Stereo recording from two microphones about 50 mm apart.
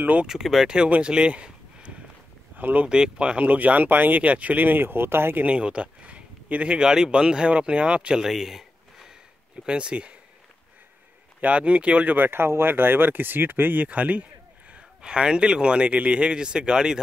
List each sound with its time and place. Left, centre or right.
0.0 s speech: right
0.3 s speech: centre
0.7 s speech: centre
2.5 s speech: right
2.9 s speech: centre; by 5.4 s right
5.4 s speech: right
8.2 s a sound: centre
9.7 s speech: right
11.4 s speech: right
12.3 s speech: right
13.8 s speech: right